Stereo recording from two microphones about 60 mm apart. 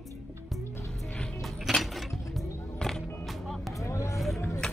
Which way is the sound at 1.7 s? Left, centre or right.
Centre.